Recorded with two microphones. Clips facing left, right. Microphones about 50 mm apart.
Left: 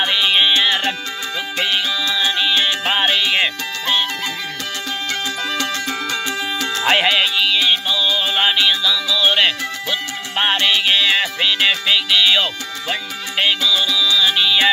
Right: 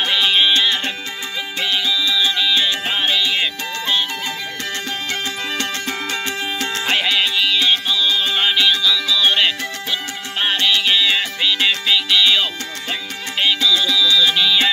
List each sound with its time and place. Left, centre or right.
0.0 s music: centre
1.6 s music: left
5.6 s music: right
6.9 s music: left
7.2 s music: centre
10.4 s music: left